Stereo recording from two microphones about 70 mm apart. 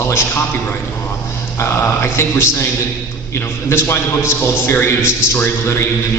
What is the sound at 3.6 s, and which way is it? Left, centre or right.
A man's voice, left.